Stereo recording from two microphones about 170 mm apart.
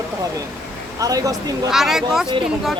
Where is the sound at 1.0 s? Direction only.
20° right (ahead or behind).